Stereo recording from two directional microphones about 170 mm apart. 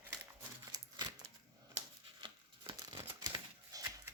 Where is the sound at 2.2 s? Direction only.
30° right (ahead or behind).